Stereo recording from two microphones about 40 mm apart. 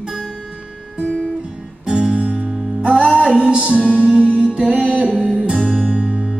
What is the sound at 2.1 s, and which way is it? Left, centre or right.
Music, right.